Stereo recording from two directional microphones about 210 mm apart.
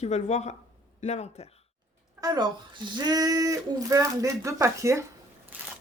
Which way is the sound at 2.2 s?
15° right (ahead or behind).